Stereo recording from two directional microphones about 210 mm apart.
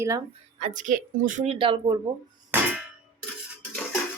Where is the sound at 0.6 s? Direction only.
35° right (ahead or behind).